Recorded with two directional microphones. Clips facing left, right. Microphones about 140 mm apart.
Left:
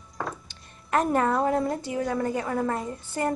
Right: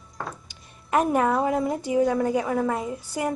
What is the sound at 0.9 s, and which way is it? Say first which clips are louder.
A woman's voice: right 2 dB; 15° right (ahead or behind).